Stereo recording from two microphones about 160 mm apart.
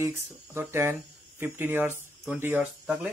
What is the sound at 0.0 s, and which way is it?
Speech, 15° right (ahead or behind).